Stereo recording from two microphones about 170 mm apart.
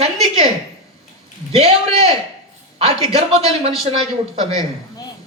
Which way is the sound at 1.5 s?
35° right (ahead or behind).